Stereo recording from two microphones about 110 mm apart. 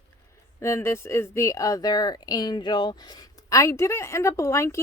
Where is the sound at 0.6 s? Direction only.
25° left (ahead or behind).